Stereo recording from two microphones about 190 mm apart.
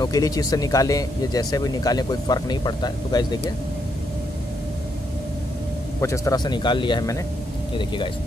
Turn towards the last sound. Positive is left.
turn(degrees=20)  # may be behind; listen again after turning